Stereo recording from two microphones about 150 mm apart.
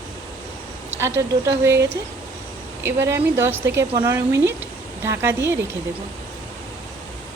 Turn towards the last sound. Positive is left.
turn(degrees=-15)  # may be behind; listen again after turning